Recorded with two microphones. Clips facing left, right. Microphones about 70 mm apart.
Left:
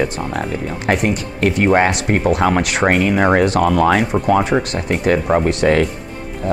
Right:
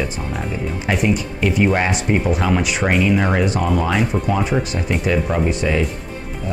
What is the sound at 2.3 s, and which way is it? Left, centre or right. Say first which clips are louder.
Speech: left 3 dB; left.